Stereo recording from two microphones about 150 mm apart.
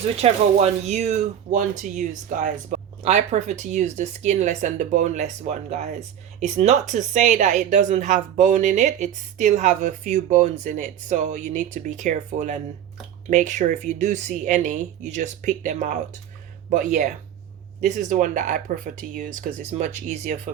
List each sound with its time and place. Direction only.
0.2 s speech: 45° right (ahead or behind)